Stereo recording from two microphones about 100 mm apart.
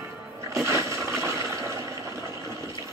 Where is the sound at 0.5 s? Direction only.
30° right (ahead or behind).